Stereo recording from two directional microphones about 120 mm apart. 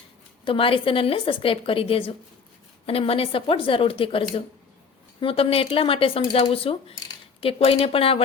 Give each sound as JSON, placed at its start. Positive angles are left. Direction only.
{"t": 0.4, "sound": "speech", "side_deg": 45}